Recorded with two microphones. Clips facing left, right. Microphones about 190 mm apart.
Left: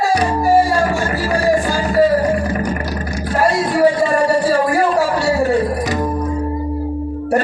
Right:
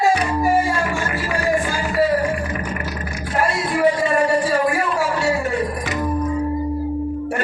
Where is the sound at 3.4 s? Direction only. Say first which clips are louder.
Left 5 dB; 35° left (ahead or behind).